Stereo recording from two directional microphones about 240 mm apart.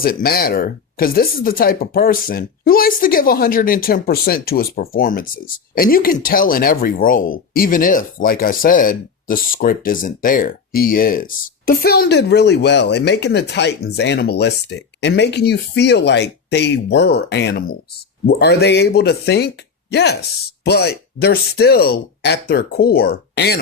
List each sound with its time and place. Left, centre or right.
0.0 s speech: left